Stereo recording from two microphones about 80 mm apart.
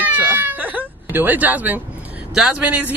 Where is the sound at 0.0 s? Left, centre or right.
Right.